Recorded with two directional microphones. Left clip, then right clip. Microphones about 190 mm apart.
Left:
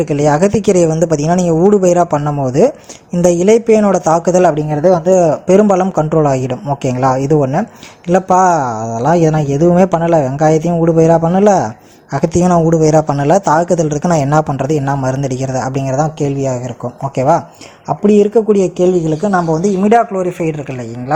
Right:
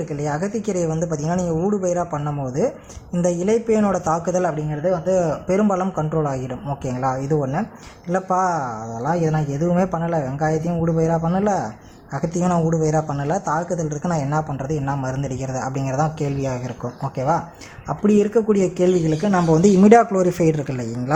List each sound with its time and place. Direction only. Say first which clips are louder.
0.0 s speech: left 13 dB; 35° left (ahead or behind); by 16.7 s 20° left (ahead or behind)
17.2 s speech: left 9 dB; 40° left (ahead or behind)
17.8 s speech: left 8 dB; 20° left (ahead or behind)
19.6 s speech: even; 25° right (ahead or behind)
20.0 s speech: left 3 dB; 10° right (ahead or behind)